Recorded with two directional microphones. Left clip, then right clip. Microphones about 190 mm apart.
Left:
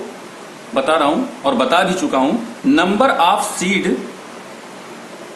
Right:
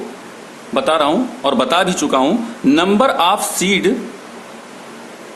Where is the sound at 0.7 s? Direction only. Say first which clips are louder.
Right 1 dB; 55° right (ahead or behind).